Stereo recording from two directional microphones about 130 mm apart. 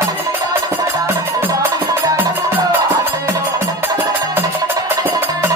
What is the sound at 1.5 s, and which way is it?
Music, 25° right (ahead or behind).